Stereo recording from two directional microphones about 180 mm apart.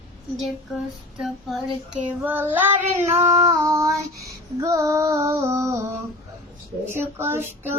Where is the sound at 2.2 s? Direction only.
10° right (ahead or behind).